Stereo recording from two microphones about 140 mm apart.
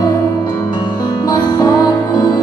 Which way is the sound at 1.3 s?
30° left (ahead or behind).